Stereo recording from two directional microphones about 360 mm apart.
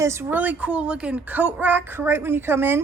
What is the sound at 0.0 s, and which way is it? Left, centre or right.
A woman's voice, centre.